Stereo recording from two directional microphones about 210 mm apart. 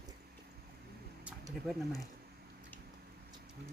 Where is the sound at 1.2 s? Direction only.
5° right (ahead or behind).